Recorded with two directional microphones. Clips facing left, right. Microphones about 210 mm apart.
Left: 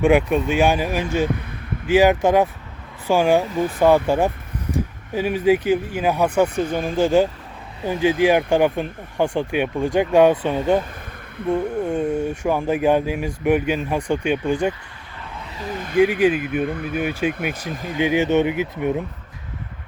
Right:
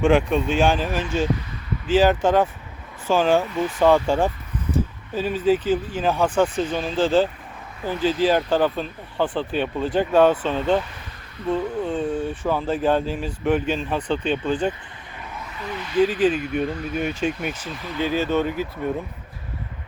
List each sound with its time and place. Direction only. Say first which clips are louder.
0.0 s speech: left 2 dB; 10° left (ahead or behind)
1.2 s speech: left 1 dB; 55° left (ahead or behind)
1.9 s speech: left 2 dB; 10° left (ahead or behind)
16.0 s speech: left 2 dB; 10° left (ahead or behind)
16.4 s speech: left 2 dB; 55° left (ahead or behind)
17.9 s speech: left 4 dB; 15° left (ahead or behind)